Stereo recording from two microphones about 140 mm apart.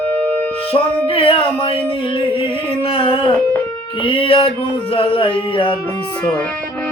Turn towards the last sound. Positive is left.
turn(degrees=40)  # may be behind; listen again after turning